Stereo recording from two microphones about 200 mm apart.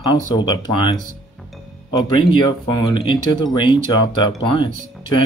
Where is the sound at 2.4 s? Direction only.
20° left (ahead or behind).